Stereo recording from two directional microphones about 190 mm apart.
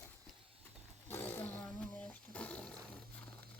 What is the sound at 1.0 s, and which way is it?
Roaring cats, 10° left (ahead or behind).